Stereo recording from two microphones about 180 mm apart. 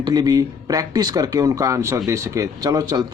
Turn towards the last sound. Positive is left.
turn(degrees=-20)  # may be behind; listen again after turning